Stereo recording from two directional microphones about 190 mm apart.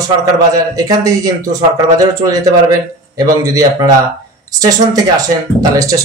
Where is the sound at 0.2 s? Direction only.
20° right (ahead or behind).